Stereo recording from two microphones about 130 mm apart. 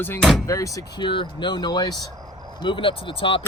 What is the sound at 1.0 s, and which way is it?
Speech, 40° left (ahead or behind).